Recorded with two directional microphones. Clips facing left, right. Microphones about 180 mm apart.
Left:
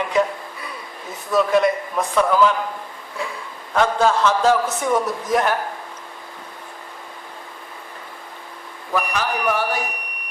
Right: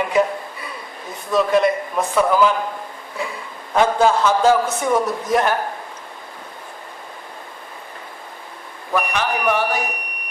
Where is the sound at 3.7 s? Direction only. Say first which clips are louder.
Right 2 dB; 15° right (ahead or behind).